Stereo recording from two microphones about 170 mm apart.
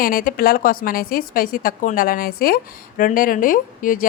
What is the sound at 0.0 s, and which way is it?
A woman's voice, 55° left (ahead or behind).